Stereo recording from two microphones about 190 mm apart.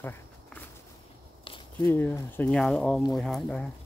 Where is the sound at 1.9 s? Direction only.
10° left (ahead or behind).